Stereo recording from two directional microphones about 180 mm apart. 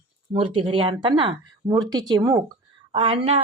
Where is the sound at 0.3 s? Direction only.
30° right (ahead or behind).